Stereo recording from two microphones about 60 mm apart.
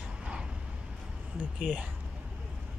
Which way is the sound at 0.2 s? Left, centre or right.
Centre.